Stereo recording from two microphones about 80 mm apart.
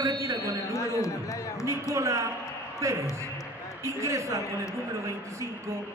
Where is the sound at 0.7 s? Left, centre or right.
Left.